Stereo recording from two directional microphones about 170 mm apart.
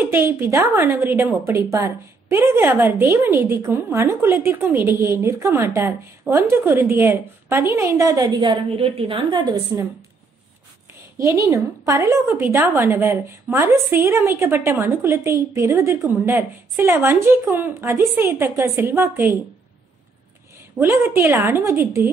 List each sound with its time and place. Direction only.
0.0 s a woman's voice: 15° right (ahead or behind)
9.7 s a woman's voice: 15° right (ahead or behind)
11.1 s a woman's voice: 20° right (ahead or behind)
20.7 s a woman's voice: 15° right (ahead or behind)